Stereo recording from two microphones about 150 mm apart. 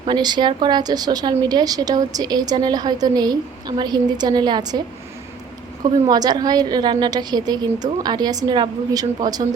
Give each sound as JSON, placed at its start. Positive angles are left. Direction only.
{"t": 0.0, "sound": "a woman's voice", "side_deg": -30}
{"t": 6.1, "sound": "a woman's voice", "side_deg": -25}